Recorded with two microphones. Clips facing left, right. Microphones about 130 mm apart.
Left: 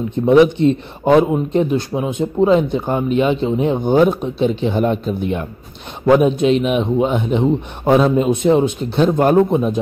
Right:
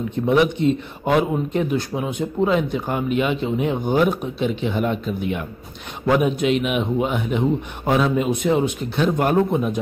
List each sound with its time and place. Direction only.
0.3 s a man's voice: 30° left (ahead or behind)